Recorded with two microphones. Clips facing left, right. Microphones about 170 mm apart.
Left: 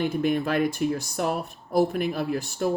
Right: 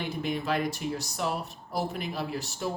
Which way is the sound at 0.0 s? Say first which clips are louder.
Left 7 dB; 50° left (ahead or behind).